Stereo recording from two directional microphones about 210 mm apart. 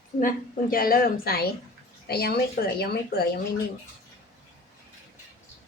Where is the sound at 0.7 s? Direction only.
45° left (ahead or behind).